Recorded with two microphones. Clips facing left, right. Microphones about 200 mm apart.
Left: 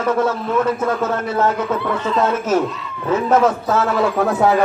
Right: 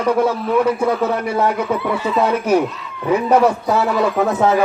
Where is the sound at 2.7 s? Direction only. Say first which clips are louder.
Left 3 dB; centre (ahead or behind).